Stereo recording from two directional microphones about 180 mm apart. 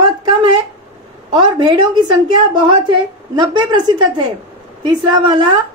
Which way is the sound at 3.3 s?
20° right (ahead or behind).